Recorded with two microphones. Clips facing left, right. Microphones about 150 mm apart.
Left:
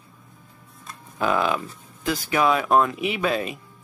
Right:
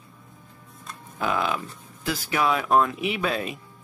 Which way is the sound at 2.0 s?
15° left (ahead or behind).